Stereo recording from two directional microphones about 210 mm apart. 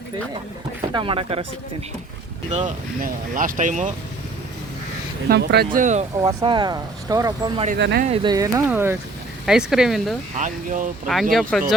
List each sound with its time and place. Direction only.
0.9 s speech: 25° right (ahead or behind)
2.5 s speech: 35° right (ahead or behind)
5.3 s speech: 50° right (ahead or behind)
6.2 s speech: 20° right (ahead or behind)
7.8 s speech: 55° right (ahead or behind)
8.0 s speech: 25° right (ahead or behind); by 10.2 s centre (ahead or behind)
10.3 s speech: 40° right (ahead or behind)
11.0 s speech: centre (ahead or behind)